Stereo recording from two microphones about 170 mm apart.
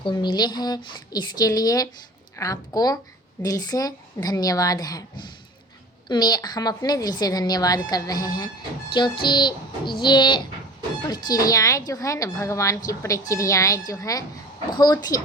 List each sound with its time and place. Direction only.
0.0 s a woman's voice: 25° left (ahead or behind)